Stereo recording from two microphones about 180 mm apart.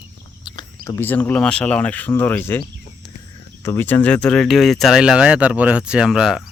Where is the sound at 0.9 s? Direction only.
10° left (ahead or behind).